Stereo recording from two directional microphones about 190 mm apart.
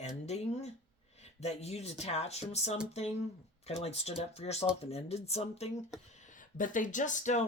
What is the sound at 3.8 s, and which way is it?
Speech, 35° left (ahead or behind).